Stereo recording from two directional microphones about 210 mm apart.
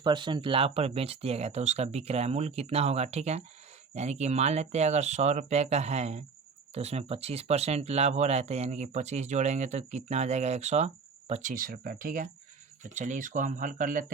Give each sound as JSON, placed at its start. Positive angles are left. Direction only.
{"t": 0.0, "sound": "speech", "side_deg": -20}